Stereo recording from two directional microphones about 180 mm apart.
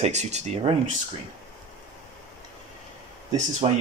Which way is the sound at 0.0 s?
40° right (ahead or behind).